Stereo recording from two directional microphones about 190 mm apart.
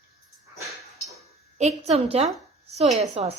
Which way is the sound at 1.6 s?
35° right (ahead or behind).